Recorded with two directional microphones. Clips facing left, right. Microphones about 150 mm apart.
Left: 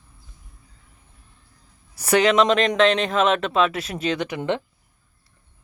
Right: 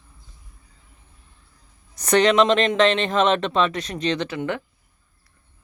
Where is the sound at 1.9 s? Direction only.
5° left (ahead or behind).